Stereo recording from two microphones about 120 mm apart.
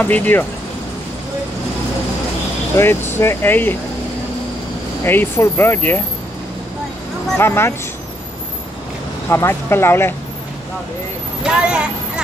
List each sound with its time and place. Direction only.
0.0 s speech: 15° left (ahead or behind)
2.7 s speech: 20° left (ahead or behind)
5.0 s speech: 15° left (ahead or behind)
7.3 s speech: 20° left (ahead or behind)
9.3 s speech: 20° left (ahead or behind)
11.4 s a woman's voice: 10° right (ahead or behind)